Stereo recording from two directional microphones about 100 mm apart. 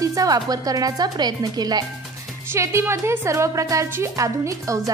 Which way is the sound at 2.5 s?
25° right (ahead or behind).